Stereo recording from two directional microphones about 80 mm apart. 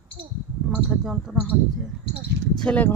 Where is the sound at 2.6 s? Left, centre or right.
Centre.